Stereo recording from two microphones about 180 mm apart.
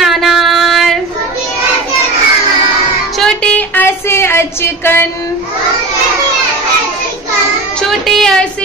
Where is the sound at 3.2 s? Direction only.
5° left (ahead or behind).